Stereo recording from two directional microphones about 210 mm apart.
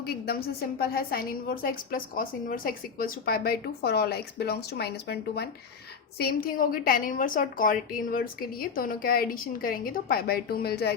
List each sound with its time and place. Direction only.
0.0 s a woman's voice: 50° left (ahead or behind)